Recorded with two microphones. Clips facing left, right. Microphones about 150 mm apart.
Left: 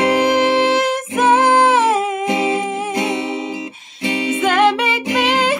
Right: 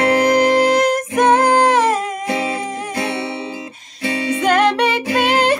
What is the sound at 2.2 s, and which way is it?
Music, 20° left (ahead or behind).